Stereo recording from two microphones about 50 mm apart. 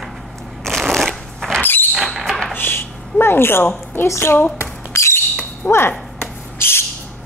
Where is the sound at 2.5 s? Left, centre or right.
Left.